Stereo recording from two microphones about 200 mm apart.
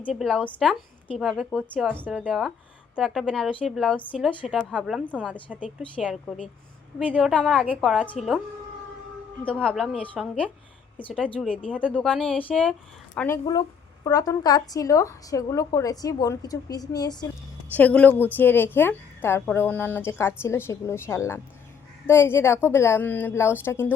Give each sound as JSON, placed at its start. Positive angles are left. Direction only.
{"t": 0.0, "sound": "a woman's voice", "side_deg": 0}
{"t": 9.4, "sound": "a woman's voice", "side_deg": 5}
{"t": 11.9, "sound": "a woman's voice", "side_deg": 5}
{"t": 17.7, "sound": "speech", "side_deg": 10}